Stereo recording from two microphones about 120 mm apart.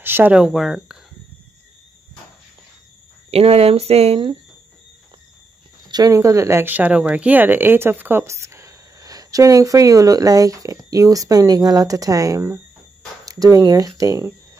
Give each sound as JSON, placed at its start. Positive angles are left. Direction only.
{"t": 0.0, "sound": "speech", "side_deg": -15}
{"t": 3.3, "sound": "speech", "side_deg": -55}
{"t": 5.9, "sound": "speech", "side_deg": -30}